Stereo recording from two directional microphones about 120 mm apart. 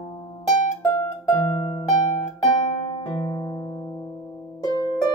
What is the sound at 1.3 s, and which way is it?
Harp, 20° left (ahead or behind).